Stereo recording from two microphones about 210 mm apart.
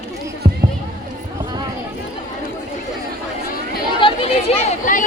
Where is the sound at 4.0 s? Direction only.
25° left (ahead or behind).